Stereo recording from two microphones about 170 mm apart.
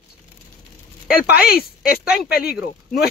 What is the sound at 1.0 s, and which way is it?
Speech, 70° left (ahead or behind).